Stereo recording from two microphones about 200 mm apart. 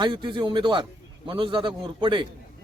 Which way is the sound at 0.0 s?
25° right (ahead or behind).